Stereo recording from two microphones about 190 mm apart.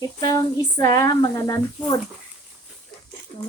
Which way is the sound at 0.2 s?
20° left (ahead or behind).